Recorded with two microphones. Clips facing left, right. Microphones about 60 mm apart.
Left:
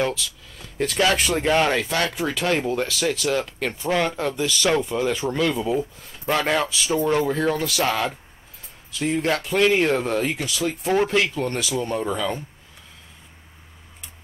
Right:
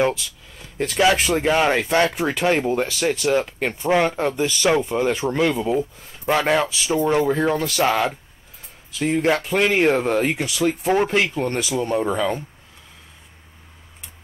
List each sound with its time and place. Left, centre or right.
0.0 s a sound: right
0.7 s speech: centre; by 5.2 s right
5.5 s speech: centre
11.1 s speech: right